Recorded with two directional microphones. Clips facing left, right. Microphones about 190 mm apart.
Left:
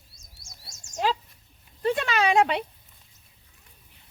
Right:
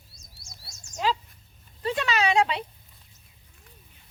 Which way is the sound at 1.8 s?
50° left (ahead or behind).